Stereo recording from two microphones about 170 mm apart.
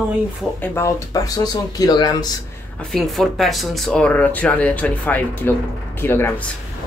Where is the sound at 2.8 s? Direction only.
Centre (ahead or behind).